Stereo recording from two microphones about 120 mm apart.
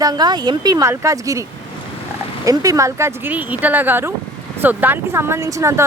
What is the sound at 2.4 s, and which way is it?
Speech, 30° right (ahead or behind).